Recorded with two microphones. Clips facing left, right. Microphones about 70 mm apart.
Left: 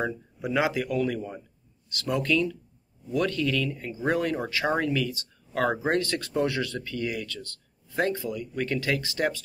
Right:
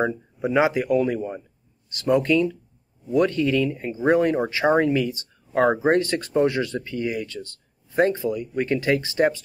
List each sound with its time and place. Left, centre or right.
0.0 s speech: right